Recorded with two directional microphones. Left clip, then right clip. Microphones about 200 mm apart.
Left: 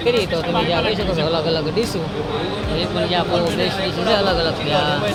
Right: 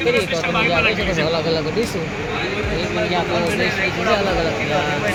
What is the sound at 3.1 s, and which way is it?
Speech, centre (ahead or behind).